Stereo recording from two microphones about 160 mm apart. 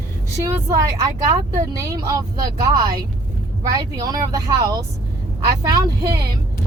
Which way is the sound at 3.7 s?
20° right (ahead or behind).